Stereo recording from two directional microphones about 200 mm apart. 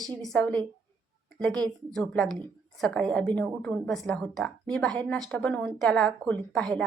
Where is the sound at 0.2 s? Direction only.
5° left (ahead or behind).